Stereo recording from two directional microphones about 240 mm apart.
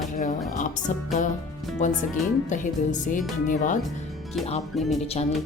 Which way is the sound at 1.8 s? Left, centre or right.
Left.